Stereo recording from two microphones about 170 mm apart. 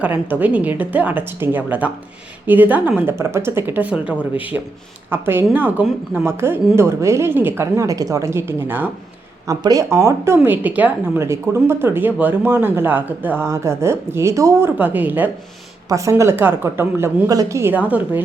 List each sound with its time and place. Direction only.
0.0 s a woman's voice: 10° right (ahead or behind)